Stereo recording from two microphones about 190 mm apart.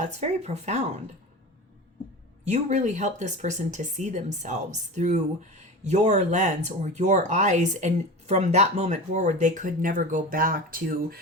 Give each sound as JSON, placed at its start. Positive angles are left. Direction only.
{"t": 0.0, "sound": "speech", "side_deg": -35}
{"t": 2.5, "sound": "speech", "side_deg": -40}